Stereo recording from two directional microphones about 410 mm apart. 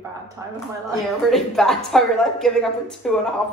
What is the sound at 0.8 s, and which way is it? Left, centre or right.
A woman's voice, centre.